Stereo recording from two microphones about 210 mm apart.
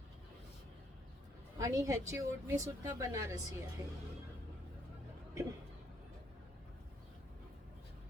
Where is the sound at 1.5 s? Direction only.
15° right (ahead or behind).